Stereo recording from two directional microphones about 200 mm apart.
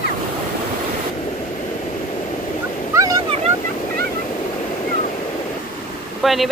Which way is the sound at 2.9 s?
15° right (ahead or behind).